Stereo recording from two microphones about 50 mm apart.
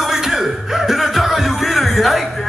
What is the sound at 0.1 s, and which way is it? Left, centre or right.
Music, centre.